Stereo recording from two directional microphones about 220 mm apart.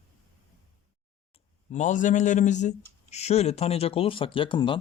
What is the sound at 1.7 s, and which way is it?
Speech, 35° left (ahead or behind).